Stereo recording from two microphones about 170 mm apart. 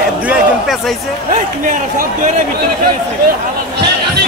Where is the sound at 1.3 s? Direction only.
50° right (ahead or behind).